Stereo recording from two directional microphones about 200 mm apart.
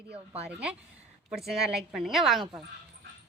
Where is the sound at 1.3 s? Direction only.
Centre (ahead or behind).